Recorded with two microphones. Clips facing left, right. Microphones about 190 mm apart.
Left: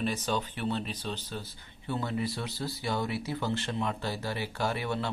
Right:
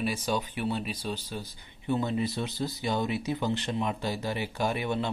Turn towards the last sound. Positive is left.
turn(degrees=-20)  # may be behind; listen again after turning